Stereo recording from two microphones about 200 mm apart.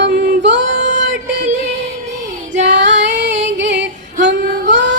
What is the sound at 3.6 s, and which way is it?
Yodeling, 60° right (ahead or behind).